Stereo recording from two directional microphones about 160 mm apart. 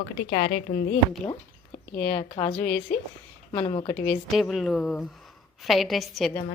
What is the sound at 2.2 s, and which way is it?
Speech, 30° left (ahead or behind).